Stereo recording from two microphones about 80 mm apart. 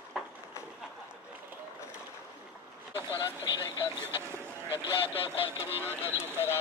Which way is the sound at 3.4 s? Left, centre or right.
Left.